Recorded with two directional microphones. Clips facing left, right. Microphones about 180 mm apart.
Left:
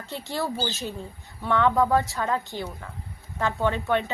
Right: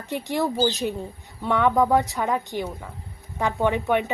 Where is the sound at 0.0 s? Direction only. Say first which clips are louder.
Right 5 dB; 15° right (ahead or behind).